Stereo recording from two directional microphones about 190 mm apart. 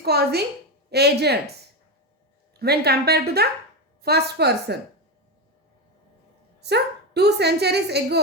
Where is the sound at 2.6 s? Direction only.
55° right (ahead or behind).